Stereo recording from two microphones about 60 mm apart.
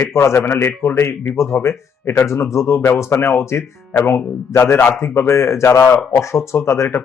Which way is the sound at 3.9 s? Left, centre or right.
Left.